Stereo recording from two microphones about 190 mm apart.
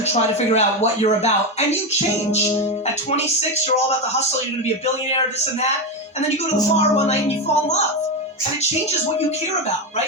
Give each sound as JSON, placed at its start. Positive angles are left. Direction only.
{"t": 0.1, "sound": "speech", "side_deg": 35}
{"t": 6.7, "sound": "speech", "side_deg": 35}